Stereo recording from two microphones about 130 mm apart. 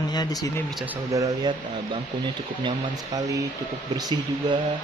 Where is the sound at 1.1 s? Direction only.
30° right (ahead or behind).